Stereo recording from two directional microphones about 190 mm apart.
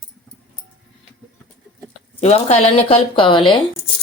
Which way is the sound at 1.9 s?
35° left (ahead or behind).